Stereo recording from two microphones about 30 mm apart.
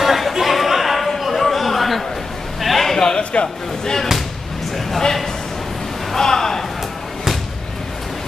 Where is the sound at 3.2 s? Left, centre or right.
Left.